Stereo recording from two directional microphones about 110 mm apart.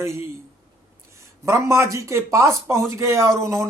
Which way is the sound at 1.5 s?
25° right (ahead or behind).